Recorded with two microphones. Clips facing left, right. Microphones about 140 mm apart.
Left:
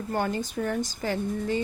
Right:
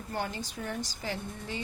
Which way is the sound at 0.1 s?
55° left (ahead or behind).